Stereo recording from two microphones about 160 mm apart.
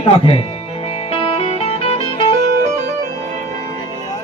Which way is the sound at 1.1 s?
35° left (ahead or behind).